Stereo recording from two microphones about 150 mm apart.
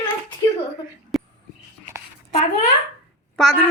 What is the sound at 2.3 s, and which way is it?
Speech, 45° left (ahead or behind).